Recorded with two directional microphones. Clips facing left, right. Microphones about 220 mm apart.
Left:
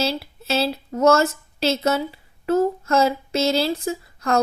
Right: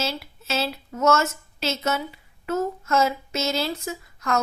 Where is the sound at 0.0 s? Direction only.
35° left (ahead or behind).